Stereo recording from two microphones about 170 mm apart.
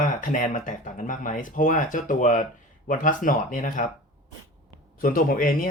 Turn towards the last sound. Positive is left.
turn(degrees=55)  # may be behind; listen again after turning